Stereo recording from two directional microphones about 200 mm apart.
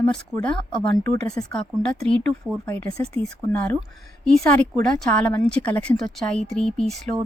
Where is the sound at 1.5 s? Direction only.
5° left (ahead or behind).